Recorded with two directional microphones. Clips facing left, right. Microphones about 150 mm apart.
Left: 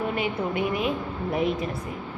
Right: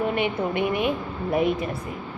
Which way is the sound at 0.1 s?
65° right (ahead or behind).